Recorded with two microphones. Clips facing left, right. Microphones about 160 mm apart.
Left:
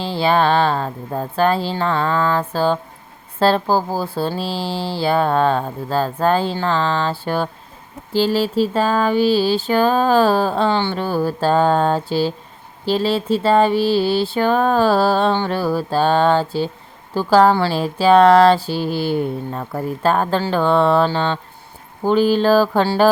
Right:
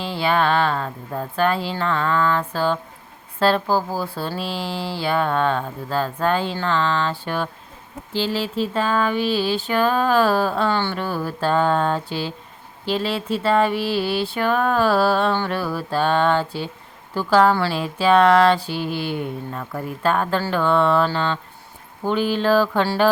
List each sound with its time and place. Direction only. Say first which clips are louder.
0.0 s speech: left 4 dB; 30° left (ahead or behind)